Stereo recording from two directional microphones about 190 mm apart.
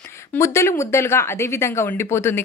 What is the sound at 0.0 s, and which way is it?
Speech, 10° left (ahead or behind).